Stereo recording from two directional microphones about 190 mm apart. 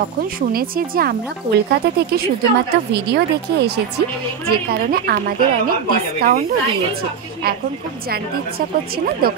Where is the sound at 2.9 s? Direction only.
60° right (ahead or behind).